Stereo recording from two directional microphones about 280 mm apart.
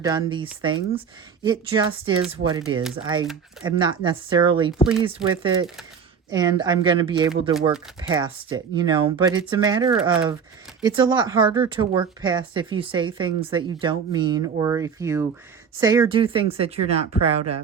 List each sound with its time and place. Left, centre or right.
0.0 s speech: centre